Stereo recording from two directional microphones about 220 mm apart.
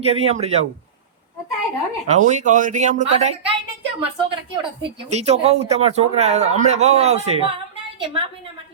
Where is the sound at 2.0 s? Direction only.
30° right (ahead or behind).